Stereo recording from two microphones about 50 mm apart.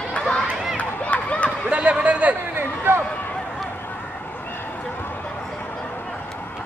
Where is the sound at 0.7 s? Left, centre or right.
Left.